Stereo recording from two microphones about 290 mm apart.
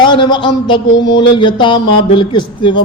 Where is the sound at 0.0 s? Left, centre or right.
Centre.